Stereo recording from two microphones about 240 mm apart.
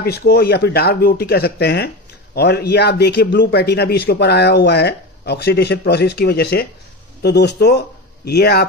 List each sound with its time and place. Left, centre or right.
0.0 s a man's voice: left